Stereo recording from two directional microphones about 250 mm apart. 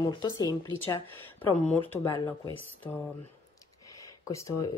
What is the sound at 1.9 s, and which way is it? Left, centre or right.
Speech, centre.